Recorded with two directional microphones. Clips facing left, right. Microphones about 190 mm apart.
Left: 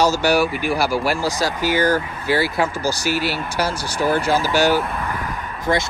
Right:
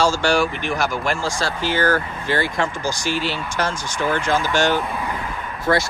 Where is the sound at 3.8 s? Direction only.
35° left (ahead or behind).